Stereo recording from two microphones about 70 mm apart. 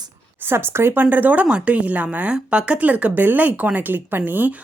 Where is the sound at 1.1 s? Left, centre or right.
Right.